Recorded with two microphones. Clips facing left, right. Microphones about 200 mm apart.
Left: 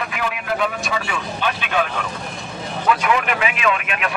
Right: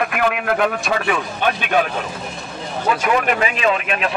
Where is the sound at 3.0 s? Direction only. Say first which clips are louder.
Right 2 dB; 40° right (ahead or behind).